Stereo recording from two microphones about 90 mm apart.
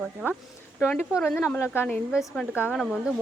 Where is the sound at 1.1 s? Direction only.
5° right (ahead or behind).